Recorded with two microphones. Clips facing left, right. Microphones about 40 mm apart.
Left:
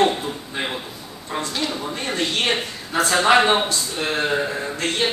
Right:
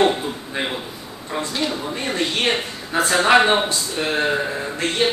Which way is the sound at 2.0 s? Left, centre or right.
Centre.